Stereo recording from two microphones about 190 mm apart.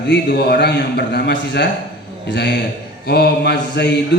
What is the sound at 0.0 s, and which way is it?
A man's voice, 65° left (ahead or behind).